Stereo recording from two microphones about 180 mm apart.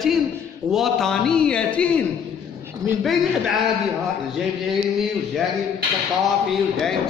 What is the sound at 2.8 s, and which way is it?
Speech, 20° right (ahead or behind).